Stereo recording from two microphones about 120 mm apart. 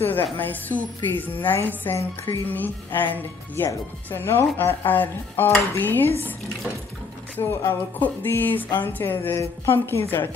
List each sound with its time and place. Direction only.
0.4 s a woman's voice: 15° left (ahead or behind)
7.3 s a woman's voice: 15° left (ahead or behind)